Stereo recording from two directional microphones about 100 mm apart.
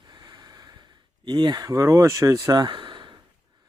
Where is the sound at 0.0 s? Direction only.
45° right (ahead or behind).